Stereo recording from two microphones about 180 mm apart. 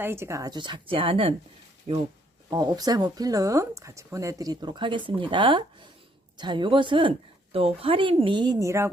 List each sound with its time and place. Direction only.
0.0 s speech: 15° right (ahead or behind); by 1.4 s 30° right (ahead or behind)
2.5 s speech: 20° right (ahead or behind)